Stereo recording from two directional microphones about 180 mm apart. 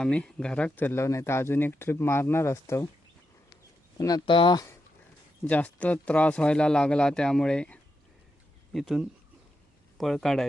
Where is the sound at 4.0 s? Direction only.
20° left (ahead or behind).